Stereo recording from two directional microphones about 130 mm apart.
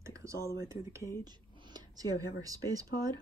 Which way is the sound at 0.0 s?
25° right (ahead or behind).